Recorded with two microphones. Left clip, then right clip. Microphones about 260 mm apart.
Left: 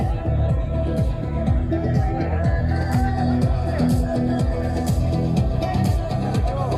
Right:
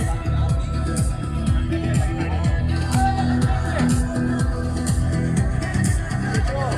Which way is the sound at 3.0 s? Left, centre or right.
Left.